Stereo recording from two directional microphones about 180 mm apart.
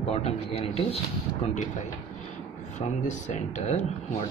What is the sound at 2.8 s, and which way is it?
A man's voice, 40° left (ahead or behind).